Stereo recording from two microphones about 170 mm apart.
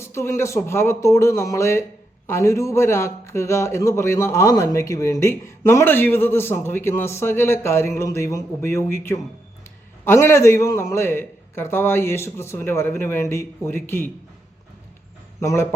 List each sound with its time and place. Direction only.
0.0 s a man's voice: 15° left (ahead or behind)
15.4 s a man's voice: 15° left (ahead or behind)